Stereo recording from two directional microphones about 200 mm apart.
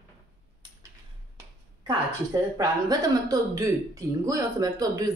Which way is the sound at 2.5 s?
20° right (ahead or behind).